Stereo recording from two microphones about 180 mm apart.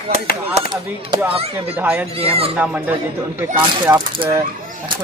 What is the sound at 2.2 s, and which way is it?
Speech, 35° right (ahead or behind).